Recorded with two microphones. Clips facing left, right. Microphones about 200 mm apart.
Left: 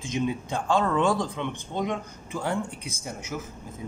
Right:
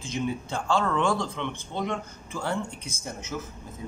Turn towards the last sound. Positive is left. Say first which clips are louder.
# even
turn(degrees=10)  # may be behind; listen again after turning